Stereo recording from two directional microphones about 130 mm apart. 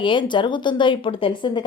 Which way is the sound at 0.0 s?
40° left (ahead or behind).